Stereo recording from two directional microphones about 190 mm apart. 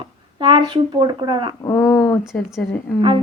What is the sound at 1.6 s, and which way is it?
Speech, 15° left (ahead or behind).